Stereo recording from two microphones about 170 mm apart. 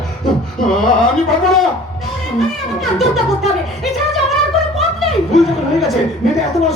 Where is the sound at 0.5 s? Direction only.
5° left (ahead or behind).